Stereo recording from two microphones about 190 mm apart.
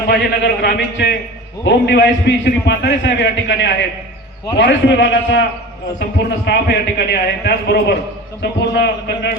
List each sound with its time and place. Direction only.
0.1 s a man's voice: 60° left (ahead or behind)